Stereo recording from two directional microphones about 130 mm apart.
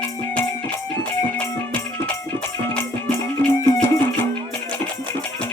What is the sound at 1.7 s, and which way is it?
Music, 20° left (ahead or behind).